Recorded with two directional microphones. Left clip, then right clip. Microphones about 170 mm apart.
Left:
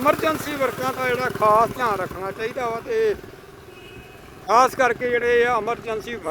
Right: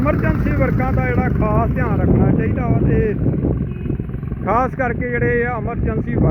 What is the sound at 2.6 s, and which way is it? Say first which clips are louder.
Speech: right 2 dB; 25° left (ahead or behind).